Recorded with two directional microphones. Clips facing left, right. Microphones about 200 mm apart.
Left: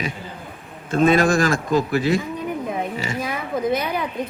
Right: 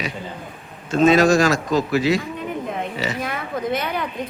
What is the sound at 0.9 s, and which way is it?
A man's voice, 55° left (ahead or behind).